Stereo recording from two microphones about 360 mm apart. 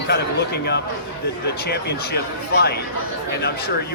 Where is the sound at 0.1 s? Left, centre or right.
Left.